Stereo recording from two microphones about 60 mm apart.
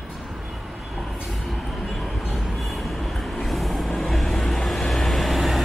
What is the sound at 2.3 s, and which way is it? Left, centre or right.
Vehicle, centre.